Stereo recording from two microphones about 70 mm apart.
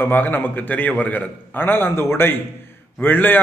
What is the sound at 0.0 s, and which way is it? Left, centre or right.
A man's voice, left.